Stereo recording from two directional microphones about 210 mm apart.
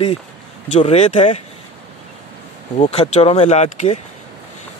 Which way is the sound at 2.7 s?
30° left (ahead or behind).